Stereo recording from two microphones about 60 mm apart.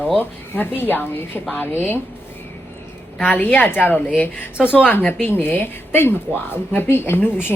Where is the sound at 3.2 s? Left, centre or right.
Left.